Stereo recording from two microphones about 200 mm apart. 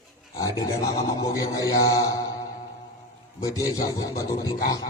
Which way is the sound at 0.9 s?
20° left (ahead or behind).